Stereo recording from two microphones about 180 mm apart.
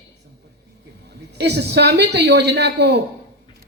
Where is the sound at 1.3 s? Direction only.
70° right (ahead or behind).